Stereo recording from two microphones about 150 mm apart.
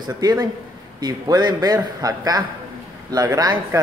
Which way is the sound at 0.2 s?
25° right (ahead or behind).